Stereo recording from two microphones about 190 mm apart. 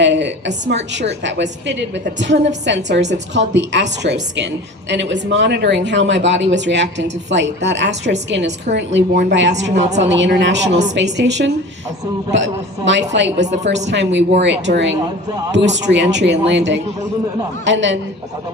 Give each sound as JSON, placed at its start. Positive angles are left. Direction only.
{"t": 0.0, "sound": "speech", "side_deg": -70}
{"t": 9.8, "sound": "a woman's voice", "side_deg": -35}
{"t": 10.1, "sound": "speech", "side_deg": -70}
{"t": 13.4, "sound": "a woman's voice", "side_deg": -40}
{"t": 13.7, "sound": "speech", "side_deg": -70}